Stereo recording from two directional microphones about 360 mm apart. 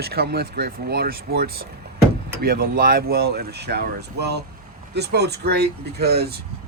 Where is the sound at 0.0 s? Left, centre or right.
Right.